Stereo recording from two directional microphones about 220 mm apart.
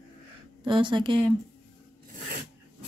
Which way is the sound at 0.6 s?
20° right (ahead or behind).